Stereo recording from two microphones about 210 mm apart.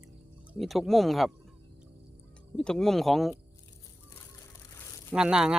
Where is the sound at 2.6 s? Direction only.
5° left (ahead or behind).